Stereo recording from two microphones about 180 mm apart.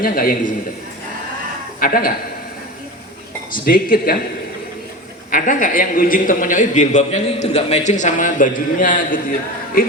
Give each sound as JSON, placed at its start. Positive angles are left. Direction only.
{"t": 0.0, "sound": "a man's voice", "side_deg": 50}
{"t": 1.8, "sound": "a man's voice", "side_deg": 55}
{"t": 3.5, "sound": "a man's voice", "side_deg": 50}
{"t": 5.3, "sound": "a man's voice", "side_deg": 50}